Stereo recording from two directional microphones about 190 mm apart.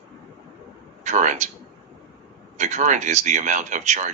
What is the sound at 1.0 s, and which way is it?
Speech, 40° right (ahead or behind).